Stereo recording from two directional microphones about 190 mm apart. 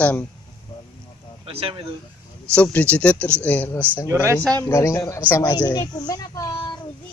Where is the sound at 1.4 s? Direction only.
30° right (ahead or behind).